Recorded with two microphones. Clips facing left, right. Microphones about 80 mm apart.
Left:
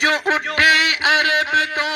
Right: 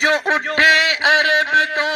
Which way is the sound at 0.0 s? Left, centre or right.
Right.